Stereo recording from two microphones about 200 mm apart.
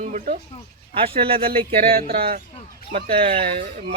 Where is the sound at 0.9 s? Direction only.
25° right (ahead or behind).